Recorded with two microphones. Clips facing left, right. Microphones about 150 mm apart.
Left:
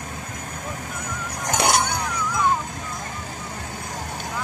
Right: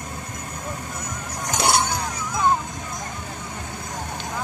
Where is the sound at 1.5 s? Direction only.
65° left (ahead or behind).